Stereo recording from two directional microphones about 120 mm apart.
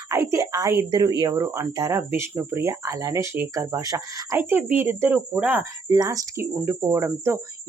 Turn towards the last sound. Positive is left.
turn(degrees=-20)  # may be behind; listen again after turning